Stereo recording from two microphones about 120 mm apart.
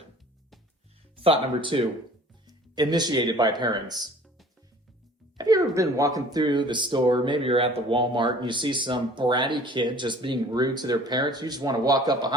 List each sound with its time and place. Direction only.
1.2 s speech: 50° right (ahead or behind)
2.5 s speech: 35° right (ahead or behind)
5.4 s a sound: 30° right (ahead or behind)
5.7 s speech: 25° right (ahead or behind)